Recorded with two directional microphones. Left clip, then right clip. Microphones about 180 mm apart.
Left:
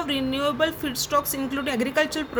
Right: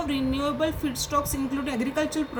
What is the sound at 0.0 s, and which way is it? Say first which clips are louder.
Speech: left 2 dB; 45° left (ahead or behind).